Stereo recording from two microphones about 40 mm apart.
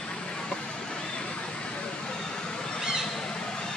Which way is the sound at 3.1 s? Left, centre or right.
Centre.